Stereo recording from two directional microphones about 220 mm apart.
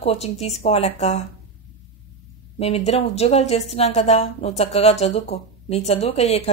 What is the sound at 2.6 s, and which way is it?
A woman's voice, 30° left (ahead or behind).